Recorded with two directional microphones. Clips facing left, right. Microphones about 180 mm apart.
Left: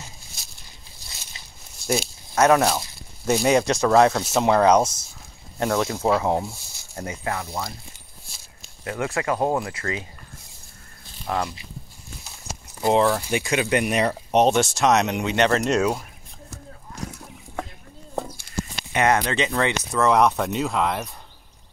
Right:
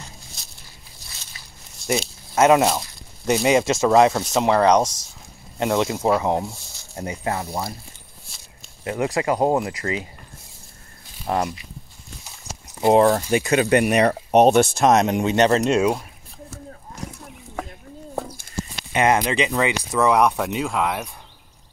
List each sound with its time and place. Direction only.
0.3 s a sound: centre (ahead or behind)
2.3 s speech: 20° right (ahead or behind)
3.3 s speech: centre (ahead or behind)
5.6 s speech: 15° right (ahead or behind)
7.2 s speech: 25° right (ahead or behind)
8.8 s speech: 20° right (ahead or behind)
11.2 s speech: 35° right (ahead or behind)
12.9 s speech: 40° right (ahead or behind)
15.5 s speech: 15° right (ahead or behind)
18.9 s speech: 20° right (ahead or behind)